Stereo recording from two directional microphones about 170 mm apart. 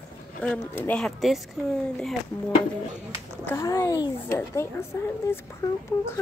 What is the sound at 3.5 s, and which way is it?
A woman's voice, 15° left (ahead or behind).